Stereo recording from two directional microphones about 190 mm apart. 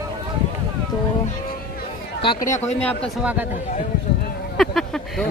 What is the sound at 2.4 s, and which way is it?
Speech, 40° left (ahead or behind).